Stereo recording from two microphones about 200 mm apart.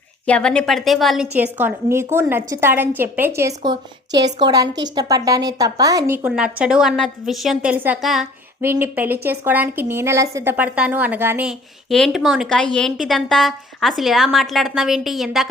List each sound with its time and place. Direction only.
0.3 s a woman's voice: 5° left (ahead or behind)